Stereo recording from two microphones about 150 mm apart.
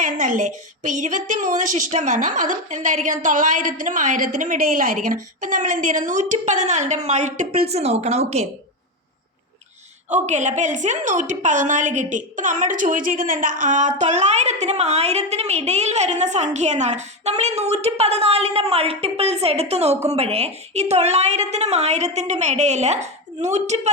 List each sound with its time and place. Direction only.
0.0 s a woman's voice: 60° right (ahead or behind)
10.1 s a woman's voice: 50° right (ahead or behind)